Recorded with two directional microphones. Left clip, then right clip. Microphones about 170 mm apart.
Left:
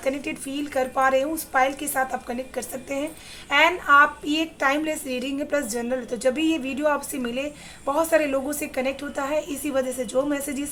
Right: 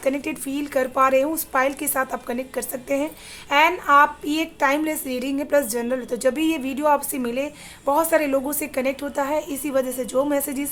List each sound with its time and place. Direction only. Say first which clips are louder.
0.0 s a woman's voice: right 3 dB; 30° right (ahead or behind)